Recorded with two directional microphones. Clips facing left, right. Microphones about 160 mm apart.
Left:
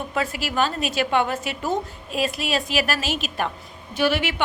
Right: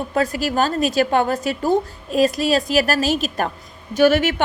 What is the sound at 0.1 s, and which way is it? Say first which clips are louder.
A woman's voice: right 8 dB; 40° right (ahead or behind).